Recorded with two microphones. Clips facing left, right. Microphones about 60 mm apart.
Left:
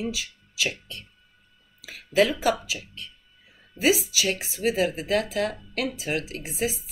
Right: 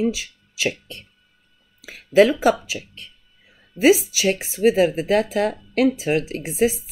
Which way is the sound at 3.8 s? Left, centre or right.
Right.